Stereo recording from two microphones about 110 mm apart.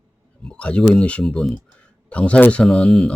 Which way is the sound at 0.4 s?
10° left (ahead or behind).